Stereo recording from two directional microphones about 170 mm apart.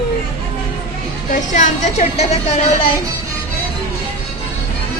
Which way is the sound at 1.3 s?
45° left (ahead or behind).